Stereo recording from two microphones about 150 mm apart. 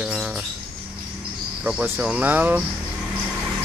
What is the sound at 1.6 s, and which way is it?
Speech, 10° right (ahead or behind).